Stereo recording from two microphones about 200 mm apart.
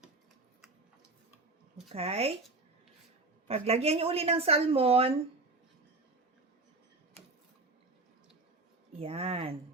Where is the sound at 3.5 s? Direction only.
30° right (ahead or behind).